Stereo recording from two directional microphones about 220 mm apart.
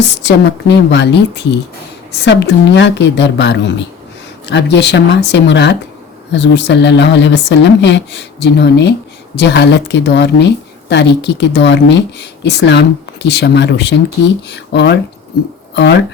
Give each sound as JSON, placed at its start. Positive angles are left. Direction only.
{"t": 0.2, "sound": "speech", "side_deg": 50}